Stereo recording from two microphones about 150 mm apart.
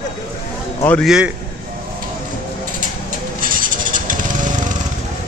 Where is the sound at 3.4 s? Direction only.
60° right (ahead or behind).